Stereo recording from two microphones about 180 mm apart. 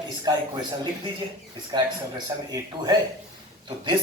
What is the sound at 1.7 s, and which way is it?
Speech, 20° right (ahead or behind).